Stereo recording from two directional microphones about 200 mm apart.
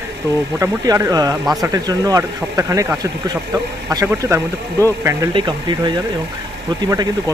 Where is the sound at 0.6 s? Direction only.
15° right (ahead or behind).